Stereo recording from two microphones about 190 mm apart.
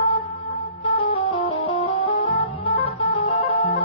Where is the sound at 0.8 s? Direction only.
25° left (ahead or behind).